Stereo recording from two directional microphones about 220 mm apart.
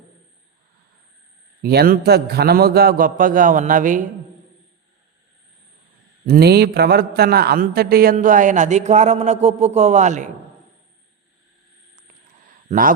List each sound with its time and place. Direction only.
1.6 s a man's voice: 45° right (ahead or behind)
6.2 s a man's voice: 45° right (ahead or behind)
12.6 s a man's voice: 40° right (ahead or behind)